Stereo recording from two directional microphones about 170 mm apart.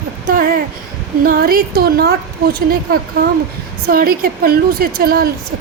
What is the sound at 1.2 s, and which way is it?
A woman's voice, 60° right (ahead or behind).